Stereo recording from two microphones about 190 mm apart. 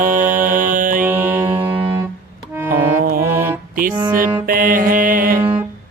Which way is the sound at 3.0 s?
50° right (ahead or behind).